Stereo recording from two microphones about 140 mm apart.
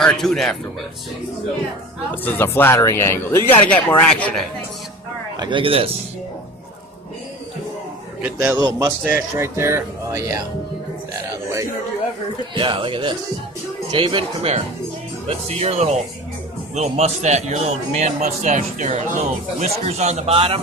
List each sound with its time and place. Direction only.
0.0 s speech: 5° left (ahead or behind)
2.2 s speech: 15° left (ahead or behind)
5.4 s speech: 35° right (ahead or behind)
8.2 s a man's voice: 10° right (ahead or behind)
8.5 s speech: 25° right (ahead or behind)
12.5 s a man's voice: 40° right (ahead or behind); by 20.3 s 55° right (ahead or behind)
20.3 s speech: 40° right (ahead or behind)